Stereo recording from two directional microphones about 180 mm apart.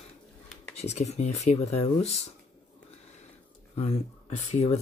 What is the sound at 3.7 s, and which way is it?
Speech, 35° left (ahead or behind).